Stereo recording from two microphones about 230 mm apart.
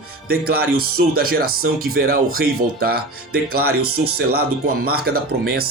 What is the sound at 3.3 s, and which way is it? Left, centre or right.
Speech, right.